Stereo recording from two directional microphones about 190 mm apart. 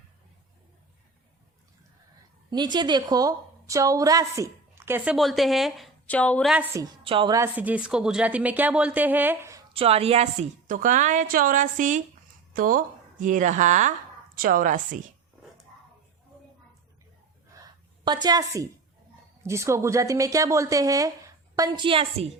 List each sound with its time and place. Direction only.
2.5 s a woman's voice: 20° right (ahead or behind); by 6.5 s 5° left (ahead or behind)
7.0 s a woman's voice: 25° right (ahead or behind)
7.3 s a woman's voice: 10° right (ahead or behind)
9.7 s speech: 30° right (ahead or behind)
10.7 s a woman's voice: 40° right (ahead or behind)
18.0 s a woman's voice: 25° right (ahead or behind)